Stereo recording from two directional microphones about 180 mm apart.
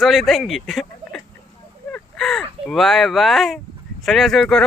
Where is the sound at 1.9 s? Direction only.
Centre (ahead or behind).